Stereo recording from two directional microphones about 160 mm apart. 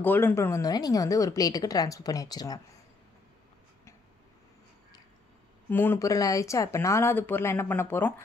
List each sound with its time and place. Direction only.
0.0 s a woman's voice: 15° left (ahead or behind)
5.7 s speech: 15° left (ahead or behind)